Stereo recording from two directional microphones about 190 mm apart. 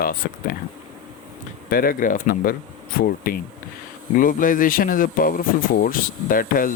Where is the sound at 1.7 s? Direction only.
50° left (ahead or behind).